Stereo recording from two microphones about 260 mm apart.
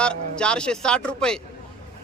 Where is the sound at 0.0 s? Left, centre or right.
Centre.